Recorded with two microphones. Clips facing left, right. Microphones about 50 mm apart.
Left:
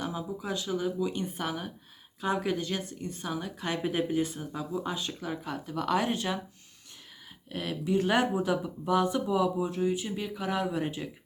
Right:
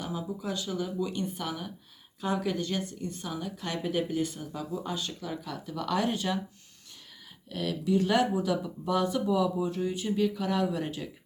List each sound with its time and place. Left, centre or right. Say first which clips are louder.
0.1 s speech: even; centre
7.5 s speech: right 1 dB; centre
9.6 s speech: left 1 dB; centre